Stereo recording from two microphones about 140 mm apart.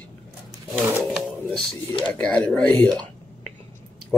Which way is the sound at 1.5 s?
40° left (ahead or behind).